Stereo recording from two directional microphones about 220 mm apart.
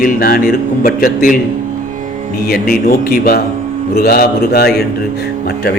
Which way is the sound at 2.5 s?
40° left (ahead or behind).